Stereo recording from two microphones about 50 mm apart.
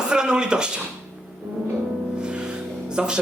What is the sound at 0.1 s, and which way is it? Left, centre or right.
Speech, centre.